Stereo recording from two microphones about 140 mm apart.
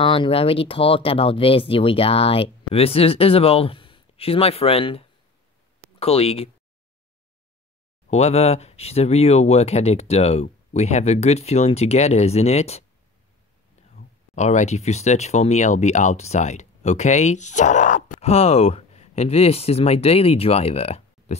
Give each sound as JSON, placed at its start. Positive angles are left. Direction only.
{"t": 0.0, "sound": "speech", "side_deg": 40}
{"t": 8.1, "sound": "speech", "side_deg": 50}
{"t": 14.3, "sound": "speech", "side_deg": 60}